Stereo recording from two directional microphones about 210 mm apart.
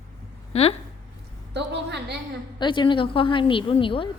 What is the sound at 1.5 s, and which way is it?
Speech, 55° right (ahead or behind).